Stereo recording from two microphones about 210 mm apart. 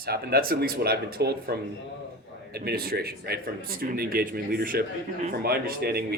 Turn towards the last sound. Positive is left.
turn(degrees=-45)  # may be behind; listen again after turning